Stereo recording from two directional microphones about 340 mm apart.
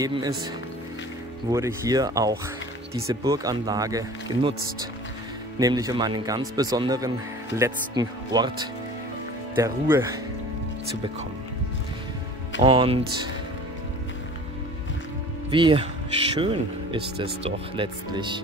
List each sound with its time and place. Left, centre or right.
0.0 s speech: centre
1.5 s speech: centre
5.6 s speech: centre
12.6 s speech: centre
15.5 s speech: centre